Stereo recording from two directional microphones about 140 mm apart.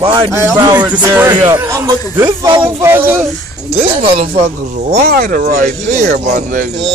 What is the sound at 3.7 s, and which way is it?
Speech, 45° right (ahead or behind).